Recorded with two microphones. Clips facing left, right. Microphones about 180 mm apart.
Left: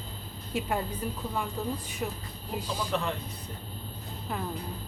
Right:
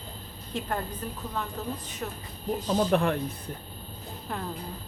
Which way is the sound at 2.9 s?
55° right (ahead or behind).